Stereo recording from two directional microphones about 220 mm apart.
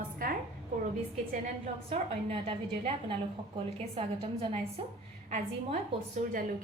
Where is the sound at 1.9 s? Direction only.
25° right (ahead or behind).